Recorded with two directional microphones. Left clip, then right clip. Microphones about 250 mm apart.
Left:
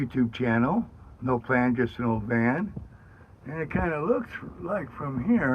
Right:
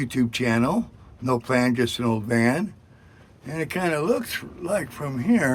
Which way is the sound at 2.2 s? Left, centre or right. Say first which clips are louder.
Right 4 dB; right.